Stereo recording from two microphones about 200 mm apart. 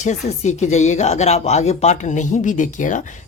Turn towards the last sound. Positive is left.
turn(degrees=40)  # may be behind; listen again after turning